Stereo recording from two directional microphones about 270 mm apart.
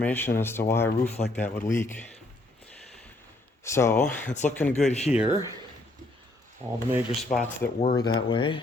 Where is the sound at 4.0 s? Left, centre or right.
Left.